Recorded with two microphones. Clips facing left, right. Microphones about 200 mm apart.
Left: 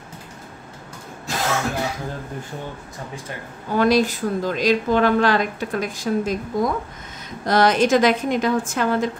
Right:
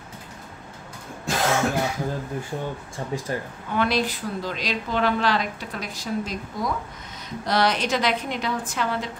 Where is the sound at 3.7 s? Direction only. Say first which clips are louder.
Left 6 dB; 40° left (ahead or behind).